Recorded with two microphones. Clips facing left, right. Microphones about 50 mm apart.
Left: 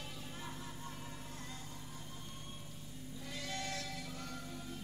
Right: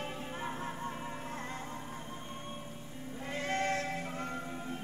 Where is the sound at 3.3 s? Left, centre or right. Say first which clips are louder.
Right 10 dB; right.